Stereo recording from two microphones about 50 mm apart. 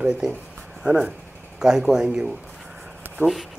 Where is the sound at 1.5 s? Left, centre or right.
Centre.